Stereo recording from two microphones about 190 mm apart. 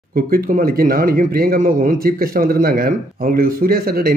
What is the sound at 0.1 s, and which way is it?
A man's voice, 50° right (ahead or behind).